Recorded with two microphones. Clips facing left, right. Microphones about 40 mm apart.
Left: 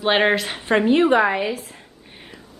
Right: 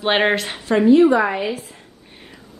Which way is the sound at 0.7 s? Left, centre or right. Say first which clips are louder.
Right 4 dB; left.